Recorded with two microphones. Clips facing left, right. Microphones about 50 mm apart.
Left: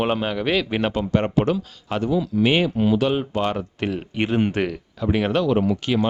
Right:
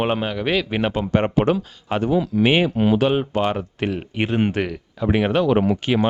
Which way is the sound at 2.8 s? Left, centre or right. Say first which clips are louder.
Right 2 dB; right.